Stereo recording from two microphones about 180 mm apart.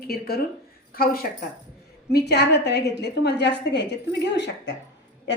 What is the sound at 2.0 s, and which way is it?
A woman's voice, 65° left (ahead or behind).